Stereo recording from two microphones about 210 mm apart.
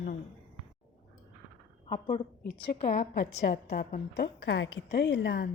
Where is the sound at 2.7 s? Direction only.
50° left (ahead or behind).